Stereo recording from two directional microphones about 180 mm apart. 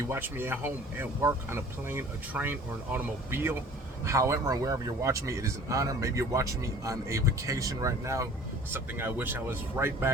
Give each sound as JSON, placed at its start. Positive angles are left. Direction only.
{"t": 0.0, "sound": "speech", "side_deg": -15}